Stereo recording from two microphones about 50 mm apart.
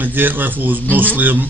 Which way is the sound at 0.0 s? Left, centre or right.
Right.